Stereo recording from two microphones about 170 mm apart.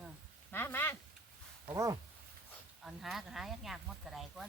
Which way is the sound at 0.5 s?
10° left (ahead or behind).